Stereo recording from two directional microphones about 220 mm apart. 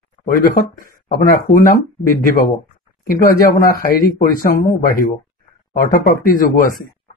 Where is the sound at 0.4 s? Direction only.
40° left (ahead or behind).